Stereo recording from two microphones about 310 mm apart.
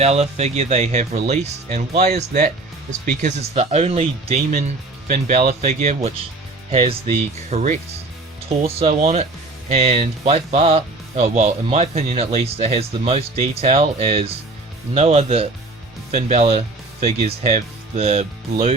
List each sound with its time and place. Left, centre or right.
0.0 s speech: right